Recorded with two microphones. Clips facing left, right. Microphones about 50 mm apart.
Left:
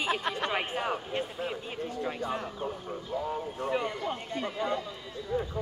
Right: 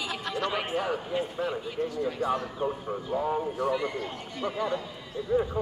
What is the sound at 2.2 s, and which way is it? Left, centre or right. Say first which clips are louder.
Speech: right 7 dB; right.